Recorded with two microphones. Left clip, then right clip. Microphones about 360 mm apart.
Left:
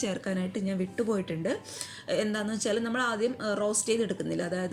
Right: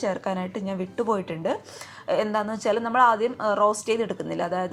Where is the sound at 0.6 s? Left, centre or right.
Right.